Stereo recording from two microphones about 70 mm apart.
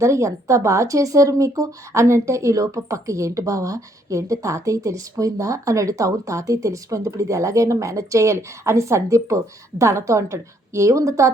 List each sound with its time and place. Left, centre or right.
0.0 s speech: right